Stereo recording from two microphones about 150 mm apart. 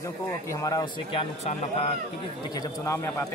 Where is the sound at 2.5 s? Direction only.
25° left (ahead or behind).